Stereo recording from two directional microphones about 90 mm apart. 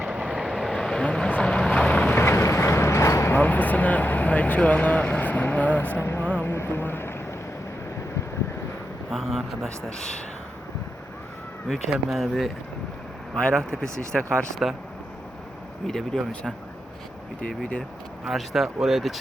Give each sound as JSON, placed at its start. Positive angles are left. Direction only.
{"t": 0.0, "sound": "vehicle", "side_deg": -10}
{"t": 3.3, "sound": "speech", "side_deg": 20}
{"t": 6.2, "sound": "vehicle", "side_deg": 15}
{"t": 6.5, "sound": "vehicle", "side_deg": 25}
{"t": 9.0, "sound": "speech", "side_deg": 0}
{"t": 11.7, "sound": "speech", "side_deg": 0}
{"t": 13.3, "sound": "speech", "side_deg": 5}
{"t": 13.8, "sound": "speech", "side_deg": -30}
{"t": 15.9, "sound": "speech", "side_deg": 5}
{"t": 18.3, "sound": "speech", "side_deg": 0}